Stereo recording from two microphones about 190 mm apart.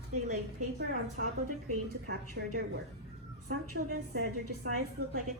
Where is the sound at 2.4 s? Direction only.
60° right (ahead or behind).